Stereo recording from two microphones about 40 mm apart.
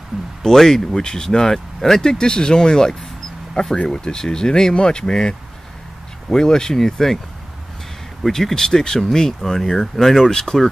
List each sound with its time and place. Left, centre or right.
0.4 s speech: centre
6.3 s speech: centre
8.3 s speech: centre